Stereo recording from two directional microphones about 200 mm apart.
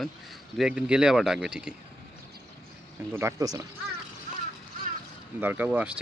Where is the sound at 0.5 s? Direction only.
5° right (ahead or behind).